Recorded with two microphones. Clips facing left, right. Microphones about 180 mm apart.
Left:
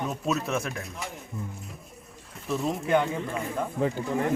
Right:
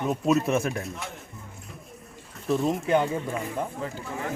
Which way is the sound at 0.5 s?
35° right (ahead or behind).